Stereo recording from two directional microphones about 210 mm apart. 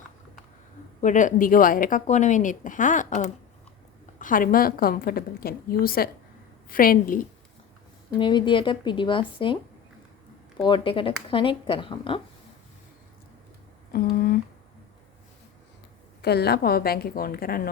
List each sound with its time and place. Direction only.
1.0 s a woman's voice: 35° left (ahead or behind)
8.2 s speech: 20° left (ahead or behind)
10.7 s speech: 25° left (ahead or behind)
13.9 s a sound: 45° left (ahead or behind)
16.2 s a woman's voice: 50° left (ahead or behind)